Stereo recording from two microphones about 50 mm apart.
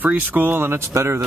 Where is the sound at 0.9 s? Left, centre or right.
Right.